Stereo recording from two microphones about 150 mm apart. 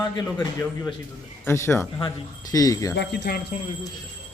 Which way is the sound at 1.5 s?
20° left (ahead or behind).